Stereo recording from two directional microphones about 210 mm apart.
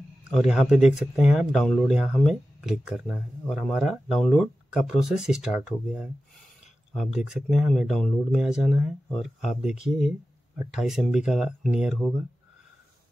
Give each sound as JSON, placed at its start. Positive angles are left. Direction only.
{"t": 0.3, "sound": "speech", "side_deg": 0}